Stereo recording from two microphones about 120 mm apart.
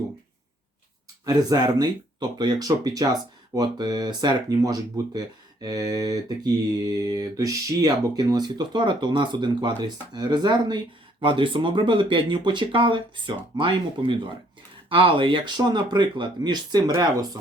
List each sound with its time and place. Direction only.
1.2 s speech: 35° right (ahead or behind)